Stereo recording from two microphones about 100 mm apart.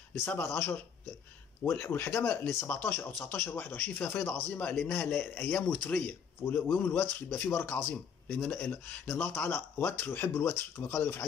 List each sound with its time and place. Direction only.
0.2 s speech: 25° left (ahead or behind)